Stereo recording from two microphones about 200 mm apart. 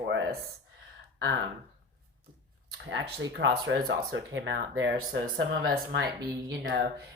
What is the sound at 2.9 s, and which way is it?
Speech, 65° right (ahead or behind).